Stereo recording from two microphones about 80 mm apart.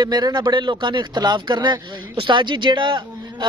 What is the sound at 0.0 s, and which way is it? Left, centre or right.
Speech, right.